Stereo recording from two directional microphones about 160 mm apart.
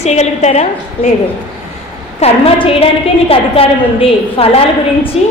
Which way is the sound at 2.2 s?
35° left (ahead or behind).